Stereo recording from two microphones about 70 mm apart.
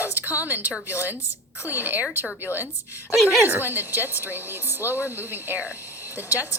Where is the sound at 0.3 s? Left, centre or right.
Right.